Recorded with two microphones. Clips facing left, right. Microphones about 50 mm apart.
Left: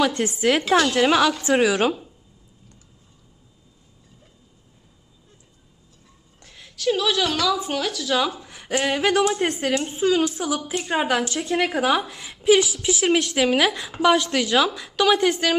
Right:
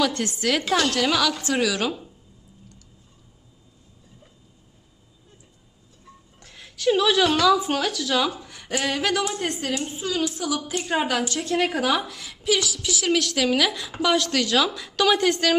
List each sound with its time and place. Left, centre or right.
0.0 s a woman's voice: centre
0.9 s a woman's voice: left
6.4 s a woman's voice: centre
9.4 s a woman's voice: left
10.6 s a woman's voice: centre
11.1 s a woman's voice: centre